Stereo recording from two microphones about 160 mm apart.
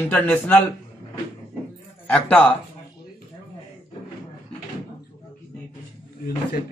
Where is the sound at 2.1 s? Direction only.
10° left (ahead or behind).